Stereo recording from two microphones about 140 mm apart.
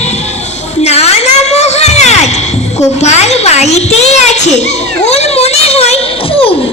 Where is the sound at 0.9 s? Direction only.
50° left (ahead or behind).